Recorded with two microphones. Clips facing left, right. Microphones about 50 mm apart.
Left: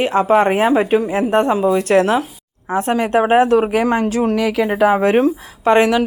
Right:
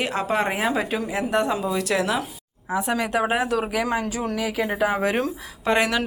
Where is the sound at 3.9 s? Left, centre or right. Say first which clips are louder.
Left 9 dB; left.